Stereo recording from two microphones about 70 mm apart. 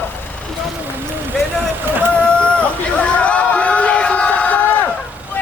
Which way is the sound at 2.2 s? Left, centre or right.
Centre.